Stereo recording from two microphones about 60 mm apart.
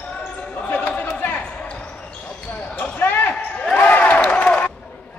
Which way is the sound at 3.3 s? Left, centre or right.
Centre.